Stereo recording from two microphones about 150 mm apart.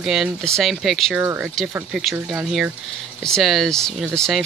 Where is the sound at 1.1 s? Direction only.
15° right (ahead or behind).